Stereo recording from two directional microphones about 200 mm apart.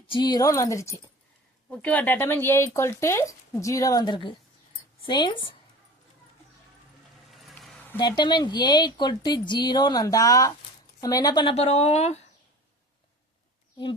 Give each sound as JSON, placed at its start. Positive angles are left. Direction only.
{"t": 0.1, "sound": "a woman's voice", "side_deg": 20}
{"t": 7.3, "sound": "vehicle", "side_deg": 0}
{"t": 7.9, "sound": "a woman's voice", "side_deg": 20}